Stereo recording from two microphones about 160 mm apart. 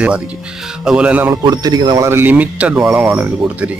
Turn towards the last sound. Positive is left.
turn(degrees=-10)  # may be behind; listen again after turning